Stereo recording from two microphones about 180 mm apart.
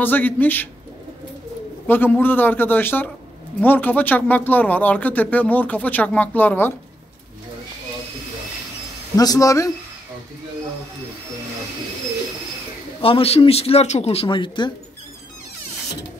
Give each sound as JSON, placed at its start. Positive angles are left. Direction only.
{"t": 0.0, "sound": "speech", "side_deg": 10}
{"t": 1.9, "sound": "speech", "side_deg": 10}
{"t": 9.1, "sound": "speech", "side_deg": 20}
{"t": 13.0, "sound": "speech", "side_deg": 30}